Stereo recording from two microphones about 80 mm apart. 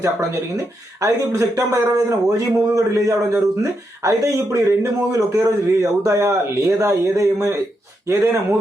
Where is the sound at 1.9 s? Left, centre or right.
Right.